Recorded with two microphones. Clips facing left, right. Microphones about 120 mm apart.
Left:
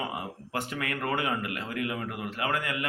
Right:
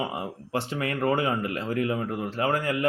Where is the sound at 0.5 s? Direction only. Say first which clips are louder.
Right 4 dB; 30° right (ahead or behind).